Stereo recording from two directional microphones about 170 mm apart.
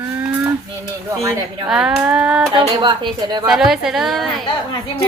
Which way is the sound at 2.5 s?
30° right (ahead or behind).